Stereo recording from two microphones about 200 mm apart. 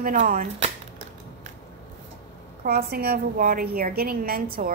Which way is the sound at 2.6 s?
50° right (ahead or behind).